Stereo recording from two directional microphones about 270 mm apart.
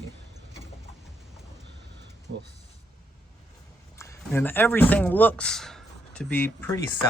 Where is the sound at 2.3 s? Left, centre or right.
Right.